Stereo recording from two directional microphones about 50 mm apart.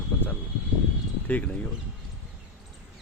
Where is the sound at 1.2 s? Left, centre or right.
Left.